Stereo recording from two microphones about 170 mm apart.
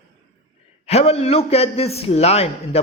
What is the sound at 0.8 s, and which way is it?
A man's voice, 35° left (ahead or behind).